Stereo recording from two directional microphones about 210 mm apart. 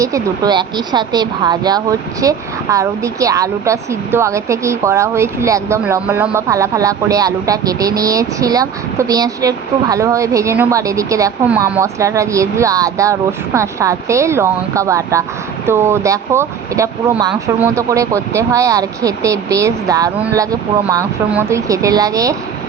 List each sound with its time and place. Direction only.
0.0 s speech: 15° right (ahead or behind)